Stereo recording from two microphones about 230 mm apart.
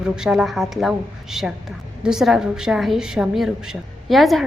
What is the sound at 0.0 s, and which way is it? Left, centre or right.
A woman's voice, centre.